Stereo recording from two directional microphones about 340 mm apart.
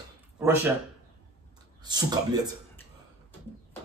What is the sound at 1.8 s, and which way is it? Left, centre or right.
Speech, centre.